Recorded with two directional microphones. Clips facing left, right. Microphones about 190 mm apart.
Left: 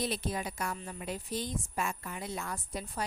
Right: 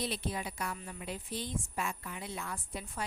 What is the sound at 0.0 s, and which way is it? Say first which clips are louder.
A woman's voice: left 2 dB; 45° left (ahead or behind).